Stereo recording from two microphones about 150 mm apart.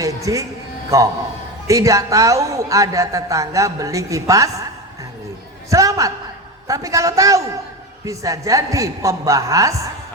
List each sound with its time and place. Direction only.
0.0 s a man's voice: 20° right (ahead or behind)
5.7 s a woman's voice: 20° right (ahead or behind)